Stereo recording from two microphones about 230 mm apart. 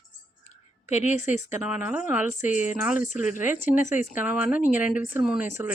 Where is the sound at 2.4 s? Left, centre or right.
Left.